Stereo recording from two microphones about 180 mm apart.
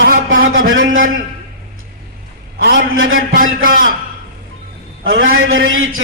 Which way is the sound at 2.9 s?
90° right.